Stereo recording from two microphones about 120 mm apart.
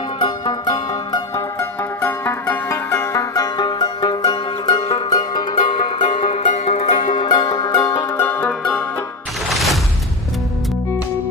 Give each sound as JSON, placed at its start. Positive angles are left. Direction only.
{"t": 0.2, "sound": "music", "side_deg": 35}
{"t": 1.3, "sound": "music", "side_deg": 20}
{"t": 7.2, "sound": "music", "side_deg": 40}
{"t": 8.1, "sound": "music", "side_deg": 20}
{"t": 9.5, "sound": "music", "side_deg": 0}